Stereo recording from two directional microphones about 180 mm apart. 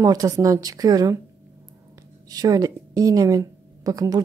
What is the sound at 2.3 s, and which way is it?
Speech, 20° right (ahead or behind).